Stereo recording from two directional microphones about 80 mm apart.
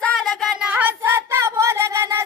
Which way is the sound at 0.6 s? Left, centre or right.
Centre.